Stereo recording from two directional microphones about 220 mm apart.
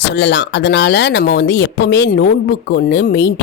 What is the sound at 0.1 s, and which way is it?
Speech, 50° left (ahead or behind).